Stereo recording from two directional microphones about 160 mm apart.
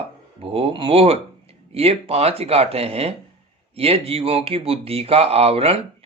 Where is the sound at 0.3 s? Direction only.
35° right (ahead or behind).